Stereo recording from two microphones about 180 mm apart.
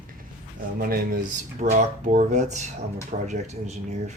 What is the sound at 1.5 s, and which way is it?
Speech, 45° right (ahead or behind).